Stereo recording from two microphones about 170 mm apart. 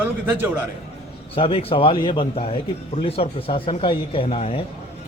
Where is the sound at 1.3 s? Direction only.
35° left (ahead or behind).